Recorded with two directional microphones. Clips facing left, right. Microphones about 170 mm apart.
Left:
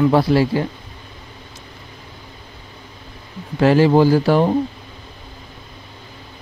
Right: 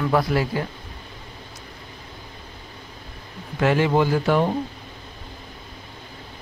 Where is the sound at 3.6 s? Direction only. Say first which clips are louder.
Left 6 dB; 35° left (ahead or behind).